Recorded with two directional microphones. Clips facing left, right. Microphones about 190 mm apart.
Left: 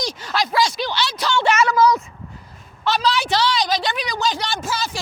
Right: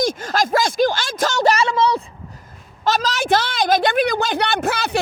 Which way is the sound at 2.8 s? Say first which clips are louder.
Even; 45° right (ahead or behind).